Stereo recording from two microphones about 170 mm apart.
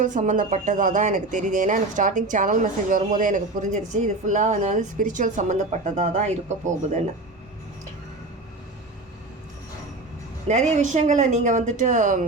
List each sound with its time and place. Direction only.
0.0 s speech: 45° right (ahead or behind)
10.5 s speech: 45° right (ahead or behind)